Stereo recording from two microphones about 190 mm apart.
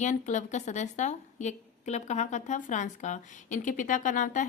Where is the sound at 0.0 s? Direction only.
40° left (ahead or behind).